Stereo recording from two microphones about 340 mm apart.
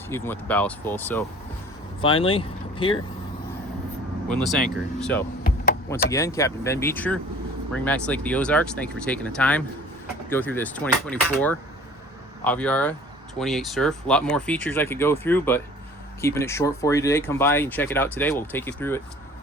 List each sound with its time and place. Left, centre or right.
0.1 s speech: centre
4.3 s speech: centre